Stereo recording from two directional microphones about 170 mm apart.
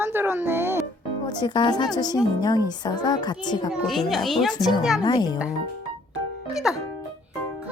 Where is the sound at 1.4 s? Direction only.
25° left (ahead or behind).